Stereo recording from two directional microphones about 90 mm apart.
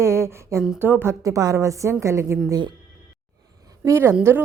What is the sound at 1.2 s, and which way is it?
A woman's voice, 40° right (ahead or behind).